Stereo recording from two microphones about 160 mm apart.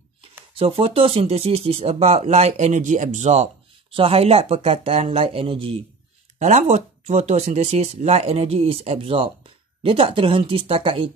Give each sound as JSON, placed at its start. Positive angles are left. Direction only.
{"t": 0.6, "sound": "speech", "side_deg": -35}